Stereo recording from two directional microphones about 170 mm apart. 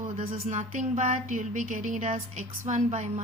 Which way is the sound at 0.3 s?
45° right (ahead or behind).